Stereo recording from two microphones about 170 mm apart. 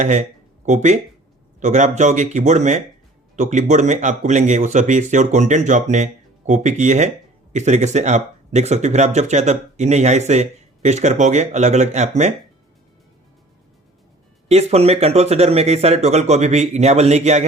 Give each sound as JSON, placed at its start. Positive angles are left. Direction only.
{"t": 0.0, "sound": "speech", "side_deg": -45}
{"t": 14.4, "sound": "speech", "side_deg": -40}